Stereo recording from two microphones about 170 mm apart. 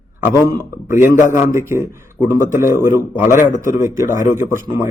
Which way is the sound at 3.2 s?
50° left (ahead or behind).